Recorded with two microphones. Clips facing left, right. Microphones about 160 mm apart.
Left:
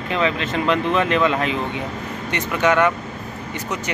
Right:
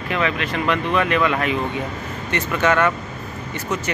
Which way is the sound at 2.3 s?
15° left (ahead or behind).